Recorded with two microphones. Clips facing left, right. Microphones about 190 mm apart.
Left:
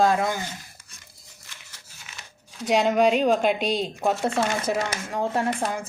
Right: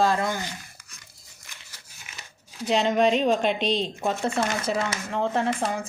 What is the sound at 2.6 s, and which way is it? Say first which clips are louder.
Speech: left 1 dB; 10° left (ahead or behind).